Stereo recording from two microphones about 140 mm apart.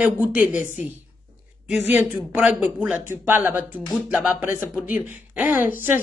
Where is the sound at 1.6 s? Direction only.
10° right (ahead or behind).